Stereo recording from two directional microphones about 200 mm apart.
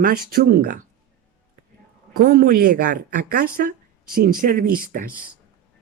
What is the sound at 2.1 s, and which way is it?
Speech, 45° right (ahead or behind).